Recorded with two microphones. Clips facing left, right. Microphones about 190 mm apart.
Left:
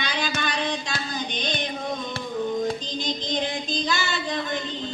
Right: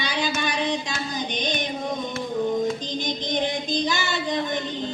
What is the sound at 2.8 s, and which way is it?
Child singing, 15° right (ahead or behind).